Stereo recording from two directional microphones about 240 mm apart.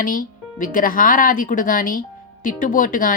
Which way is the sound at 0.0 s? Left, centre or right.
Left.